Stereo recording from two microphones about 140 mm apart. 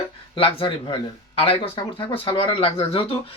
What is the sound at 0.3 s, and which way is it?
Speech, 40° left (ahead or behind).